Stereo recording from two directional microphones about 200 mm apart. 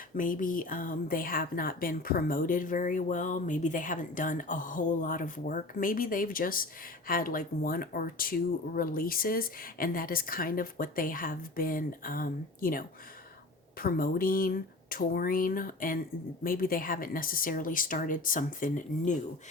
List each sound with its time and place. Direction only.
0.2 s a woman's voice: 40° left (ahead or behind)